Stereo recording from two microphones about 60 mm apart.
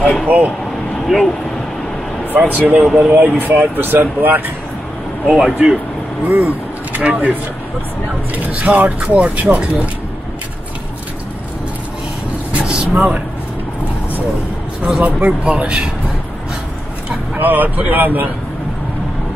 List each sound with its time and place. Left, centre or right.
1.0 s speech: centre
2.3 s speech: right
2.9 s speech: centre
3.2 s speech: right
5.2 s speech: centre
6.2 s vehicle: right
7.0 s speech: right
8.5 s speech: right
12.5 s vehicle: centre
15.0 s speech: right
17.4 s speech: right